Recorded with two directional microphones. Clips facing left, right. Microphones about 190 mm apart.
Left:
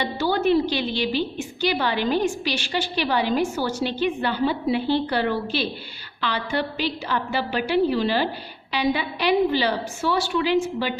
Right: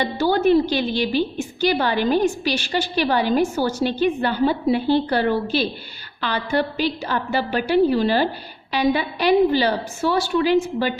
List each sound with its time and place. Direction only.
0.0 s a woman's voice: 45° right (ahead or behind)